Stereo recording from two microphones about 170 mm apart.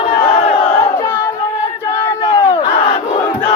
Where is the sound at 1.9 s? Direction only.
20° left (ahead or behind).